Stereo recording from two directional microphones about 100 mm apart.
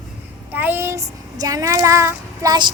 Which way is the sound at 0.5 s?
20° right (ahead or behind).